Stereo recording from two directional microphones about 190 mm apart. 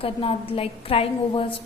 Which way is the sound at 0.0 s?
30° left (ahead or behind).